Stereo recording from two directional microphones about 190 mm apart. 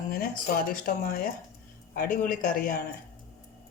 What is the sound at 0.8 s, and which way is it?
Speech, 50° left (ahead or behind).